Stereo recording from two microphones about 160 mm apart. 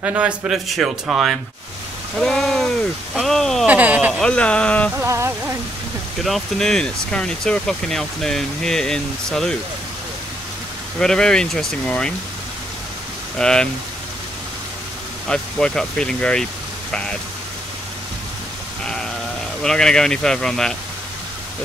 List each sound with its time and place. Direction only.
0.0 s speech: 10° right (ahead or behind)
3.6 s speech: 10° right (ahead or behind)
4.1 s speech: 5° left (ahead or behind)
5.0 s speech: 15° right (ahead or behind)
6.2 s speech: centre (ahead or behind)
11.0 s speech: 5° left (ahead or behind)
13.4 s speech: 5° left (ahead or behind)
15.2 s speech: 5° left (ahead or behind)
19.6 s speech: 5° left (ahead or behind)